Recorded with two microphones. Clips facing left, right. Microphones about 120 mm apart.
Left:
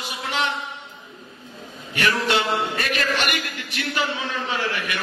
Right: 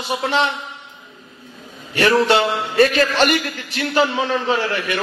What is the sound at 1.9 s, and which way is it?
A man's voice, 35° right (ahead or behind).